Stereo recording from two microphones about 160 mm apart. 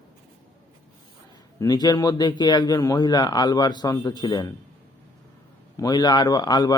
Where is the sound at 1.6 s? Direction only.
25° left (ahead or behind).